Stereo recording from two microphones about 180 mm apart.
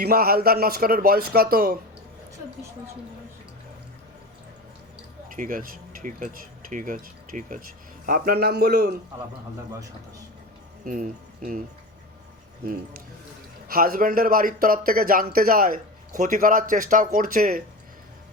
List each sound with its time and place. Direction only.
0.0 s a man's voice: 60° right (ahead or behind)
5.3 s a man's voice: 50° right (ahead or behind)
10.8 s speech: 50° right (ahead or behind)
13.7 s a man's voice: 55° right (ahead or behind)